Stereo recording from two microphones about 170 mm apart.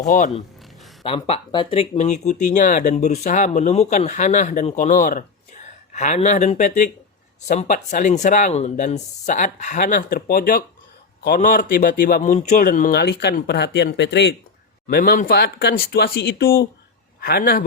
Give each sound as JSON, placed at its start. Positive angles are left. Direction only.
{"t": 0.0, "sound": "speech", "side_deg": 50}
{"t": 1.0, "sound": "speech", "side_deg": 35}
{"t": 12.6, "sound": "speech", "side_deg": 55}
{"t": 13.0, "sound": "speech", "side_deg": 80}
{"t": 14.8, "sound": "speech", "side_deg": 65}